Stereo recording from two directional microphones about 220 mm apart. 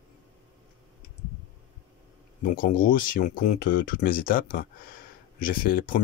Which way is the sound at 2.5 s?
40° left (ahead or behind).